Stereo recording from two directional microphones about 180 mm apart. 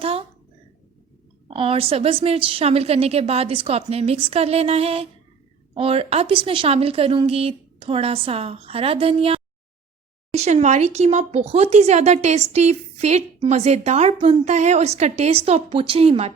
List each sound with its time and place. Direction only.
0.0 s speech: 35° right (ahead or behind)
1.5 s speech: 30° right (ahead or behind)